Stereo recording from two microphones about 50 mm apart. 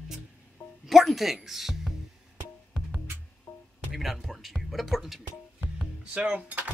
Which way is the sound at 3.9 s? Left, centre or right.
Centre.